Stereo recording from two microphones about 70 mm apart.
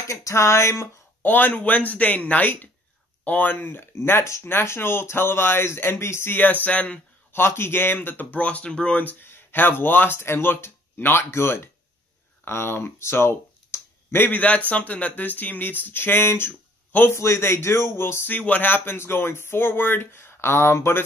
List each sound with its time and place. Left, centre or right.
0.1 s a sound: left
1.2 s speech: left
3.5 s speech: left
6.3 s speech: left
7.3 s speech: left
14.7 s speech: centre; by 21.0 s left